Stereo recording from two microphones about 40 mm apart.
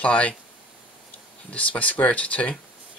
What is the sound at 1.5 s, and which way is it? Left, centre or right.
Speech, left.